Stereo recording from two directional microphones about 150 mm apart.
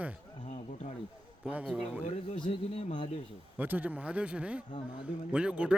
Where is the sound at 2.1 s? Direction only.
35° left (ahead or behind).